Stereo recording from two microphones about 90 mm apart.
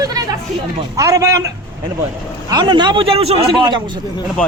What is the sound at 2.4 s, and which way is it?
A man's voice, 55° right (ahead or behind).